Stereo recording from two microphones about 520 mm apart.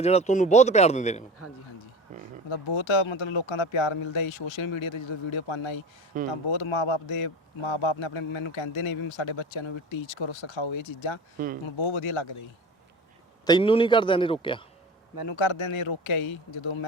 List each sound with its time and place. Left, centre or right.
0.0 s a man's voice: centre
1.4 s speech: left
2.5 s a man's voice: left
6.1 s speech: centre
6.5 s a man's voice: left
11.3 s speech: centre
11.6 s a man's voice: left
13.4 s a man's voice: centre
15.3 s a man's voice: left